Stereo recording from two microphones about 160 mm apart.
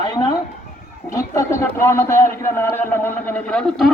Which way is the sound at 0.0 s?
25° left (ahead or behind).